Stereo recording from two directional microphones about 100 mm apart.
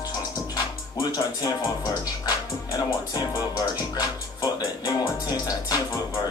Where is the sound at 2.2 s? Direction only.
40° left (ahead or behind).